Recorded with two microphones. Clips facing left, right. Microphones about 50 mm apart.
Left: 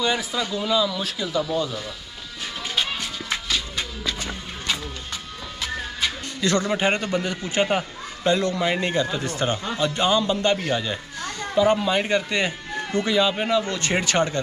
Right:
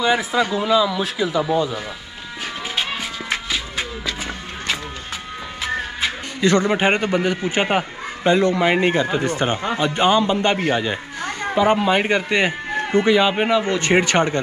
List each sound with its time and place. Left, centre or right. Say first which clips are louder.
0.0 s a man's voice: right 6 dB; centre
2.7 s music: right 1 dB; centre
5.6 s a man's voice: right 4 dB; centre